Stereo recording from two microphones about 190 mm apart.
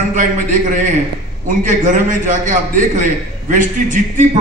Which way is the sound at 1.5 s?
45° right (ahead or behind).